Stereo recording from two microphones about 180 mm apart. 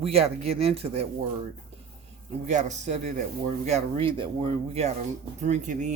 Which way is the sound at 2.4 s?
40° right (ahead or behind).